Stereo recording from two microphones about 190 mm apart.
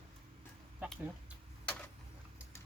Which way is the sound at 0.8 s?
5° right (ahead or behind).